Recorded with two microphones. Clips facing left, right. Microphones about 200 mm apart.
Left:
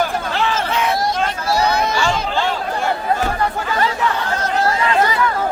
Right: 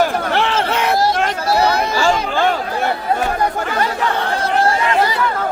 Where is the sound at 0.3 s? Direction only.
65° right (ahead or behind).